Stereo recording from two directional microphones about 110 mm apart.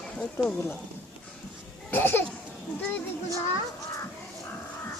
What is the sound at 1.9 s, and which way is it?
Speech, 20° left (ahead or behind).